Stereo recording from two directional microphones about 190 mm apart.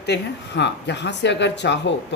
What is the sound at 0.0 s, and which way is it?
Speech, 65° left (ahead or behind).